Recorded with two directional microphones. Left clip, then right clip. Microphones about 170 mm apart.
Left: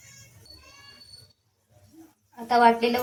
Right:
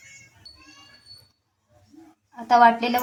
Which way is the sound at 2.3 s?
25° right (ahead or behind).